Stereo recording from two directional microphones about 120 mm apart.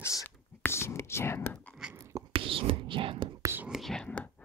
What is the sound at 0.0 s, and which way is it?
Whispering, 25° left (ahead or behind).